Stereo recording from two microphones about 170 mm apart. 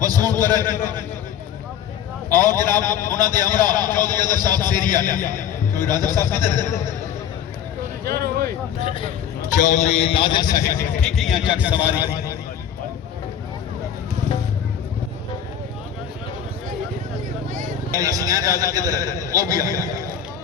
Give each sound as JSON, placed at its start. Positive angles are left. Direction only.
{"t": 0.0, "sound": "a man's voice", "side_deg": -20}
{"t": 2.3, "sound": "a man's voice", "side_deg": -20}
{"t": 8.0, "sound": "a sound", "side_deg": -65}
{"t": 8.8, "sound": "a man's voice", "side_deg": 30}
{"t": 11.0, "sound": "a man's voice", "side_deg": 0}
{"t": 17.9, "sound": "a man's voice", "side_deg": -20}